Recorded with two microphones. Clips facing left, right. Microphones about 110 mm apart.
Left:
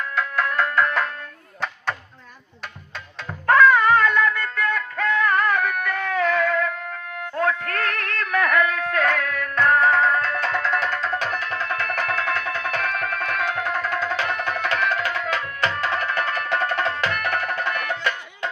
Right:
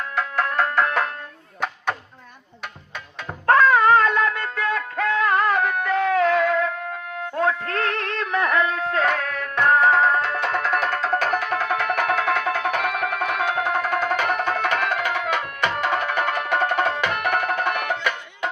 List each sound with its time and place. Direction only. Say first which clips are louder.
0.2 s music: right 1 dB; 30° right (ahead or behind)
3.4 s music: even; 35° right (ahead or behind)
10.5 s music: right 1 dB; 45° right (ahead or behind)
12.9 s music: right 2 dB; 15° right (ahead or behind)
13.6 s music: right 3 dB; 55° right (ahead or behind)
15.3 s tabla: right 1 dB; 15° right (ahead or behind)
16.0 s music: right 2 dB; 20° right (ahead or behind)